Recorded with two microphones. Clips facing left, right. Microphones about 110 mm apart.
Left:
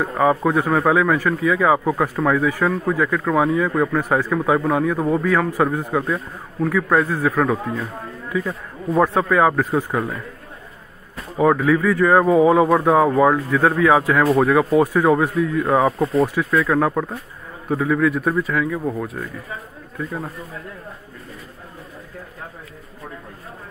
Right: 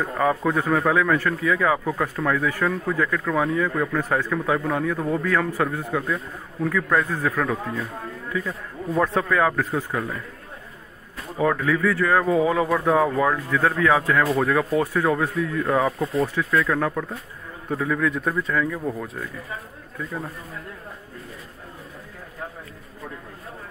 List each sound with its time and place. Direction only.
0.0 s a man's voice: 15° left (ahead or behind)
11.3 s speech: 15° left (ahead or behind)
15.6 s speech: 25° left (ahead or behind); by 18.8 s 5° left (ahead or behind)